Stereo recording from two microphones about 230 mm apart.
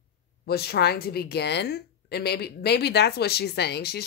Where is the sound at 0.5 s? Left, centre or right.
Left.